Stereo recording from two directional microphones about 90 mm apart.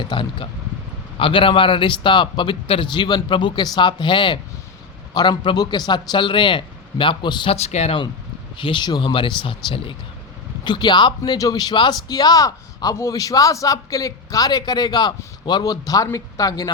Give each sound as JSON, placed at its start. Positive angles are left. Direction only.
{"t": 0.0, "sound": "speech", "side_deg": 65}
{"t": 5.1, "sound": "speech", "side_deg": 55}
{"t": 5.5, "sound": "a man's voice", "side_deg": 50}
{"t": 10.6, "sound": "a man's voice", "side_deg": 55}